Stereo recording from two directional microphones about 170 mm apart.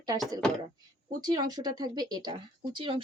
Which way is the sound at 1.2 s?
25° right (ahead or behind).